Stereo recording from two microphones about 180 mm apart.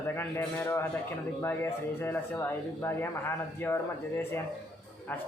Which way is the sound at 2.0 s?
15° left (ahead or behind).